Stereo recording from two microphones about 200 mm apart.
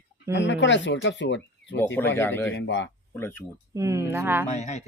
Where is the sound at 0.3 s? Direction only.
65° left (ahead or behind).